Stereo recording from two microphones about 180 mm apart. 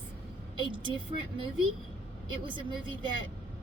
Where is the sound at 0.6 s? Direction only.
25° right (ahead or behind).